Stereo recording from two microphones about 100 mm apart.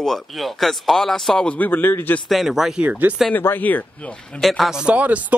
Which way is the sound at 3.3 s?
20° left (ahead or behind).